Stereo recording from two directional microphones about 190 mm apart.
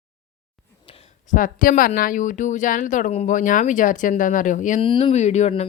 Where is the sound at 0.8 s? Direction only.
30° left (ahead or behind).